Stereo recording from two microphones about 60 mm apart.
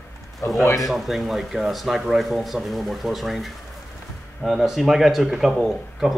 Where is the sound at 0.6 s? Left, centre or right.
Left.